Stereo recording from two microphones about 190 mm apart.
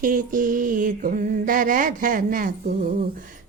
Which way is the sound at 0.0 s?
45° right (ahead or behind).